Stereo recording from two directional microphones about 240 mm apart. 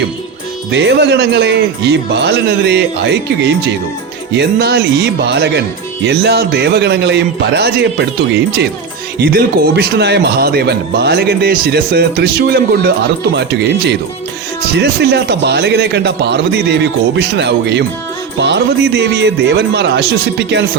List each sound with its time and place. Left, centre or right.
0.7 s speech: right
9.1 s a man's voice: right